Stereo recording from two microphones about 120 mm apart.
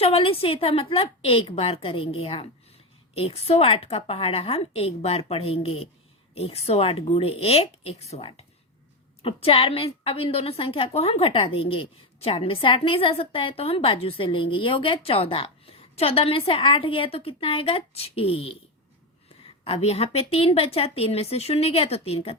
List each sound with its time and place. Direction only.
0.0 s a woman's voice: 50° left (ahead or behind)
9.2 s a woman's voice: 50° left (ahead or behind)
19.6 s a woman's voice: 55° left (ahead or behind)